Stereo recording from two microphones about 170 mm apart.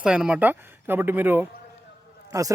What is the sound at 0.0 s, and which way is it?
A man's voice, 5° right (ahead or behind).